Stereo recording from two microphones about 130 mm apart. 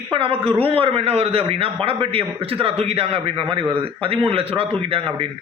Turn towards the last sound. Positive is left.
turn(degrees=-45)  # may be behind; listen again after turning